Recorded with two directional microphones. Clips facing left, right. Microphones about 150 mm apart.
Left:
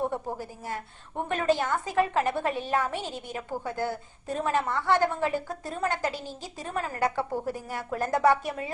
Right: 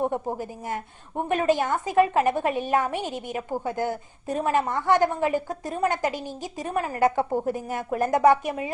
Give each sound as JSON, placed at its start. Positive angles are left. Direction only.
{"t": 0.0, "sound": "a woman's voice", "side_deg": -15}